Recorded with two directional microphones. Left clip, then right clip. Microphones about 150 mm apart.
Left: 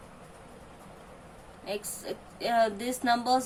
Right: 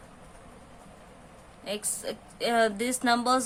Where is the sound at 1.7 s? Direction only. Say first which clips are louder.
Right 2 dB; 90° right.